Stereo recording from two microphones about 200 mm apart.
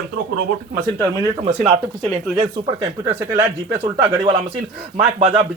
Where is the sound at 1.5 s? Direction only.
35° right (ahead or behind).